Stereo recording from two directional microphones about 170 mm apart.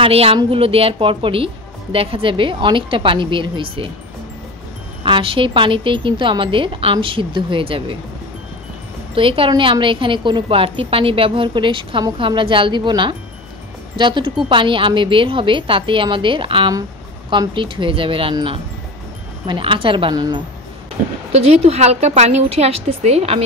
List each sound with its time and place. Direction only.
0.0 s a woman's voice: 35° right (ahead or behind)
5.0 s a woman's voice: 30° right (ahead or behind)
9.1 s a woman's voice: 30° right (ahead or behind)
21.3 s a woman's voice: 40° right (ahead or behind)